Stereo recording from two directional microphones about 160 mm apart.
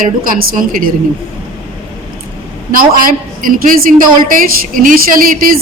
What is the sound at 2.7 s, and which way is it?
A woman's voice, 60° right (ahead or behind).